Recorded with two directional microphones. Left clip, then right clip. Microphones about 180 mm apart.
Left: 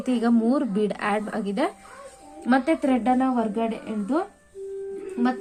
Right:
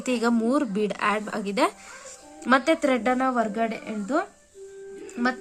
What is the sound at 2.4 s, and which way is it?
A woman's voice, 30° right (ahead or behind).